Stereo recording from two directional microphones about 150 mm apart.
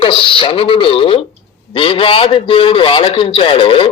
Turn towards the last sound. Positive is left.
turn(degrees=35)  # may be behind; listen again after turning